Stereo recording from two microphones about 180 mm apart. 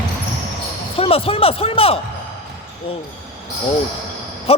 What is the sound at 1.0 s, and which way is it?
Speech, 30° left (ahead or behind).